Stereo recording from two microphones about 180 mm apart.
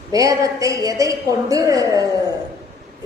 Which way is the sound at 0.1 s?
20° right (ahead or behind).